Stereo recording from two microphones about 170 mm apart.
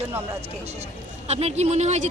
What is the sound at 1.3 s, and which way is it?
Speech, 40° right (ahead or behind).